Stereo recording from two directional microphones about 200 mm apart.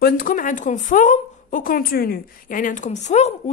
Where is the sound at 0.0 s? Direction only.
45° left (ahead or behind).